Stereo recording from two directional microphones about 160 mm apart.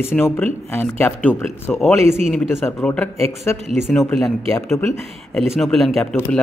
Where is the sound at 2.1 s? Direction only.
Centre (ahead or behind); by 3.6 s 15° left (ahead or behind).